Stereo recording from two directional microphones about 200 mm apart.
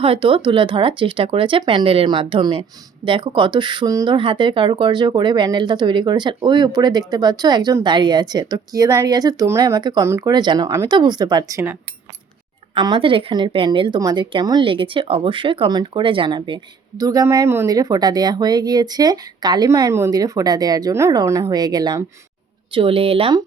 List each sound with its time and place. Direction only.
0.0 s speech: 25° right (ahead or behind); by 11.8 s 10° right (ahead or behind)
12.7 s speech: 25° right (ahead or behind)